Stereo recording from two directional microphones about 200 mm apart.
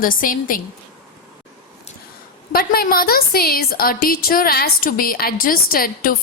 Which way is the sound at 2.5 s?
50° left (ahead or behind).